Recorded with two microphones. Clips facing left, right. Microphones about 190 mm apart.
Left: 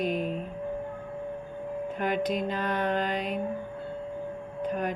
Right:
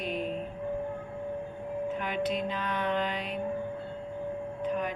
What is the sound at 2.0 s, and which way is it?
Mantra, 45° left (ahead or behind).